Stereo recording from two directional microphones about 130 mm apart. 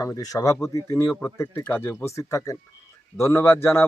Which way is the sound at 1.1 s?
10° left (ahead or behind).